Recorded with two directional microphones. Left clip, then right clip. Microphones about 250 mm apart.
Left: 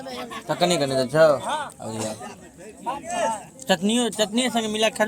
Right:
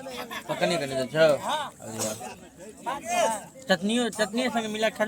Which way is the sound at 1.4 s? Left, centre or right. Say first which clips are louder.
Left 2 dB; right.